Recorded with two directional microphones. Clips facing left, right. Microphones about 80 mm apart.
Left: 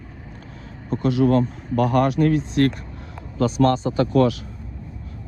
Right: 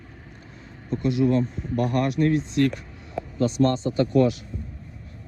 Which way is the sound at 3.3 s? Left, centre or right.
Left.